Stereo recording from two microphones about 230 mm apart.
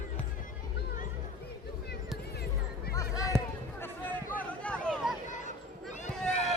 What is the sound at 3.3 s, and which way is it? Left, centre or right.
Basketball bounce, centre.